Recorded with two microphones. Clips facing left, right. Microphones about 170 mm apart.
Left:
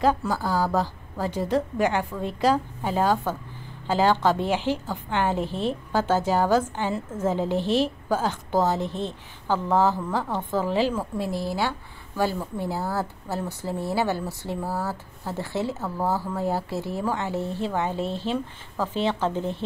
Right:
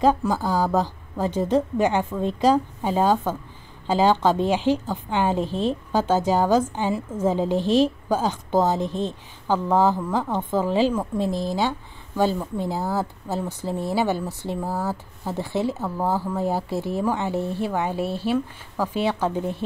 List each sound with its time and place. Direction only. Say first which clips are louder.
0.0 s a woman's voice: right 3 dB; 20° right (ahead or behind)